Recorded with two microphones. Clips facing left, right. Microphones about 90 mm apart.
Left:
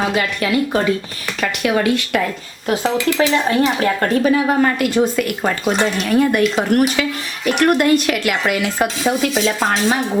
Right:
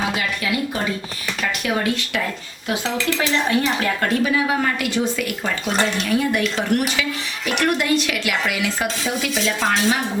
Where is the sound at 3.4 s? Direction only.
35° left (ahead or behind).